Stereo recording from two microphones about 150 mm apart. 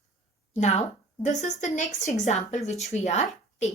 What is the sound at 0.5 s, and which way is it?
A woman's voice, 50° left (ahead or behind).